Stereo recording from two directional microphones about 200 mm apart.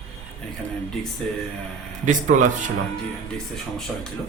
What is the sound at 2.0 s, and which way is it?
Speech, 40° right (ahead or behind).